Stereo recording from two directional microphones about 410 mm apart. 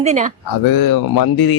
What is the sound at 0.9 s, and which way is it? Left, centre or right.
Speech, left.